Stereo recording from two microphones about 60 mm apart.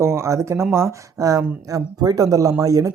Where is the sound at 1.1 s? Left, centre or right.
Right.